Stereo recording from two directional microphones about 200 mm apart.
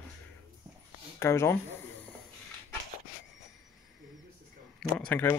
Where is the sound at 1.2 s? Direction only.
15° left (ahead or behind).